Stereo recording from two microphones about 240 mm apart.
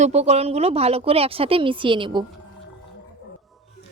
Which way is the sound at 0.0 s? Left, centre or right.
Right.